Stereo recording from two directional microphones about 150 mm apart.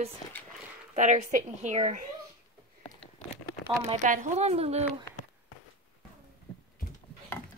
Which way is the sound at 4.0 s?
55° right (ahead or behind).